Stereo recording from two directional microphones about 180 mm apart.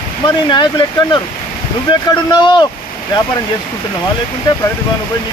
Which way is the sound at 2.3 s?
25° left (ahead or behind).